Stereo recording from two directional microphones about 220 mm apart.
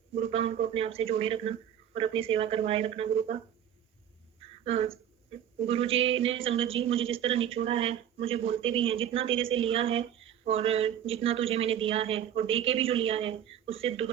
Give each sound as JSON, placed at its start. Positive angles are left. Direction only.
{"t": 0.2, "sound": "a man's voice", "side_deg": -25}
{"t": 4.4, "sound": "a sound", "side_deg": -25}
{"t": 5.5, "sound": "a man's voice", "side_deg": -25}